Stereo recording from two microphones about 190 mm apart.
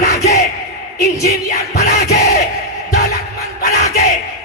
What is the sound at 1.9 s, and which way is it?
Battle cry, 55° left (ahead or behind).